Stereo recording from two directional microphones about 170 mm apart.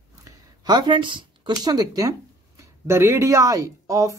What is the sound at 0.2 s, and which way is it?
A woman's voice, 25° right (ahead or behind).